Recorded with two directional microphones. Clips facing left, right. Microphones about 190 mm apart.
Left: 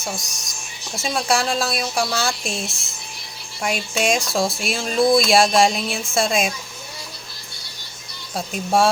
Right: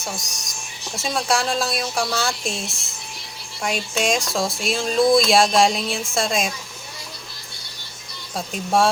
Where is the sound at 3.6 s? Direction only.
5° left (ahead or behind).